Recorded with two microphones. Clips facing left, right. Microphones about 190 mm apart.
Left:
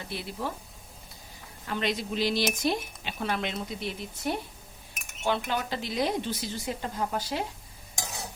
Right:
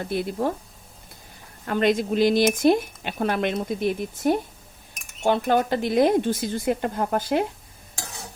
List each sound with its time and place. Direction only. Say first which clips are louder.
0.0 s speech: right 10 dB; 50° right (ahead or behind)
1.6 s speech: right 9 dB; 50° right (ahead or behind)
5.5 s speech: right 10 dB; 50° right (ahead or behind)